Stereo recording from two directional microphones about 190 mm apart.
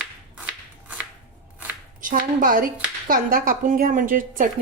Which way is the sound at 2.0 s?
45° right (ahead or behind).